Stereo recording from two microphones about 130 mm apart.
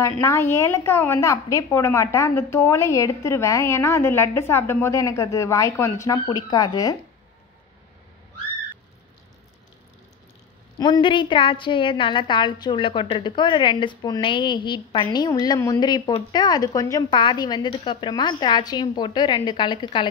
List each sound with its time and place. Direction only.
0.0 s a woman's voice: 20° left (ahead or behind)
6.1 s a woman's voice: 35° left (ahead or behind)
10.8 s a woman's voice: 40° left (ahead or behind)